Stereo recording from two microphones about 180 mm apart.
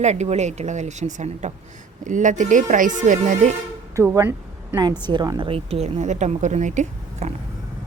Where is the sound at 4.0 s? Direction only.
15° right (ahead or behind); by 7.3 s 40° right (ahead or behind).